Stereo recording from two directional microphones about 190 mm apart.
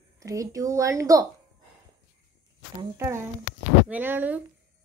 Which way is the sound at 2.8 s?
15° right (ahead or behind).